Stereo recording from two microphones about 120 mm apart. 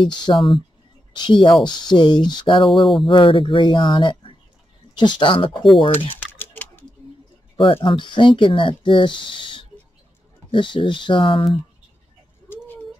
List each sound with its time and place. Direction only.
0.0 s speech: 40° left (ahead or behind)
2.6 s speech: centre (ahead or behind)
3.1 s speech: 45° left (ahead or behind)
6.3 s typing: 15° left (ahead or behind)
7.5 s speech: 50° left (ahead or behind)